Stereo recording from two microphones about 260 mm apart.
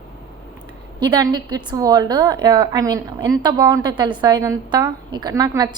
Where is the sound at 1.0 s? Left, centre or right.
Centre.